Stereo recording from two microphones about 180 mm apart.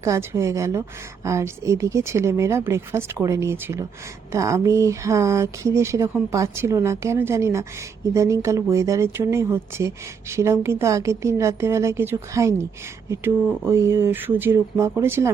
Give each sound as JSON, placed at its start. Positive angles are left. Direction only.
{"t": 0.0, "sound": "speech", "side_deg": -15}